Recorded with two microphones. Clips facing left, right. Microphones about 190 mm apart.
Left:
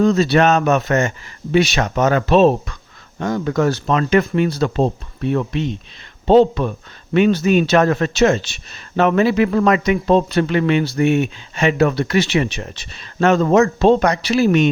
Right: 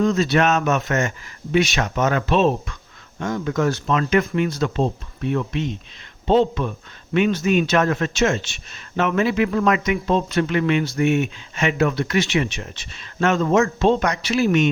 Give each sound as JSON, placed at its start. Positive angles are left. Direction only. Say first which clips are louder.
{"t": 0.0, "sound": "speech", "louder": "left 4 dB", "side_deg": 35}